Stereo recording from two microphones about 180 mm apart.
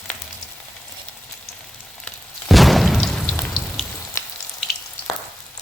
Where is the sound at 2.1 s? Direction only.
Centre (ahead or behind).